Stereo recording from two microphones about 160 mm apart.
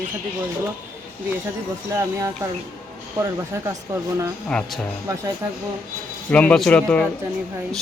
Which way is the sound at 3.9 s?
20° right (ahead or behind).